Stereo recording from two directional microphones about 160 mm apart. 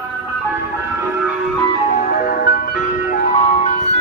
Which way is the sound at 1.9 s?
65° left (ahead or behind).